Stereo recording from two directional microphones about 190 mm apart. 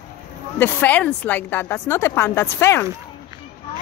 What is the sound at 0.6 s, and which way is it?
A woman's voice, 10° left (ahead or behind).